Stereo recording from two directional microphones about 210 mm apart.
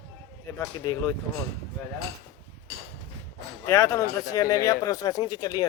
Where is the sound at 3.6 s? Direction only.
15° left (ahead or behind).